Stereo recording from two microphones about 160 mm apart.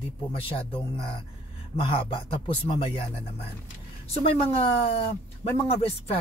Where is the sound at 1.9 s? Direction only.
35° left (ahead or behind).